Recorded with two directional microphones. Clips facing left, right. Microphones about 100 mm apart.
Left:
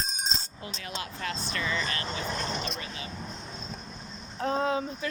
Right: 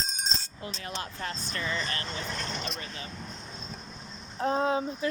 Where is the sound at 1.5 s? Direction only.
35° right (ahead or behind).